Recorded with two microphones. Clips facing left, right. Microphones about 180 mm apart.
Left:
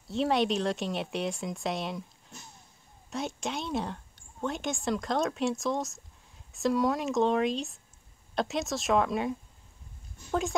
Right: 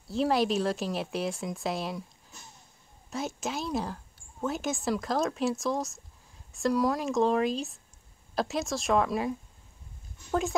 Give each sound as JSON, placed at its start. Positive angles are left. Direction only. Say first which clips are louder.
{"t": 0.1, "sound": "speech", "louder": "right 1 dB", "side_deg": 0}